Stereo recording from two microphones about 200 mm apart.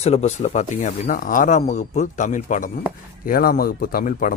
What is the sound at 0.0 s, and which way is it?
Speech, 35° left (ahead or behind).